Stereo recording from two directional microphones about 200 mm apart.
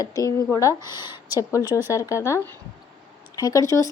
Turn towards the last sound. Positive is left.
turn(degrees=15)  # may be behind; listen again after turning